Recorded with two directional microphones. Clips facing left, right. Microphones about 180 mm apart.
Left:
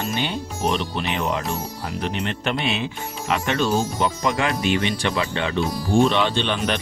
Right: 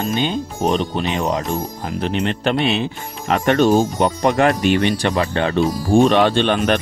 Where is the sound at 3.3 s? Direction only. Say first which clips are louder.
Right 7 dB; 50° right (ahead or behind).